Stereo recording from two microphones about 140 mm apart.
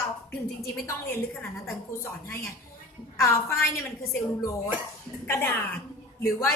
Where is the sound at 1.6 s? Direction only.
20° left (ahead or behind).